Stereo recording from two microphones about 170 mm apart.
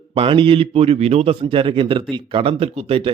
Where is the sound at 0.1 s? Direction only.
30° right (ahead or behind).